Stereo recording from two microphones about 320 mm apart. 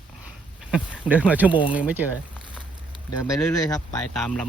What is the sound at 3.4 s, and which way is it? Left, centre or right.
Speech, centre.